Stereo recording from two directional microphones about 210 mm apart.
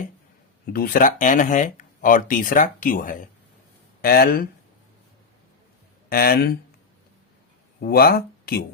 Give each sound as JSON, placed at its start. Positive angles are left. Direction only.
{"t": 0.7, "sound": "speech", "side_deg": 45}
{"t": 6.1, "sound": "speech", "side_deg": 45}
{"t": 7.8, "sound": "speech", "side_deg": 45}